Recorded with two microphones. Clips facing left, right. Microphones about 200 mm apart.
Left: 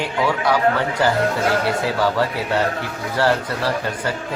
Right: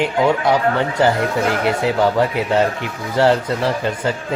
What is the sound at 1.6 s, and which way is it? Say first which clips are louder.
A man's voice: right 3 dB; 20° right (ahead or behind).